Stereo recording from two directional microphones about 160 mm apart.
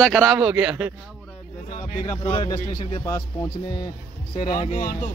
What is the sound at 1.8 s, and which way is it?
Speech, 55° left (ahead or behind).